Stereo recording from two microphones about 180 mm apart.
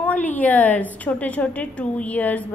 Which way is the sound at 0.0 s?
10° left (ahead or behind).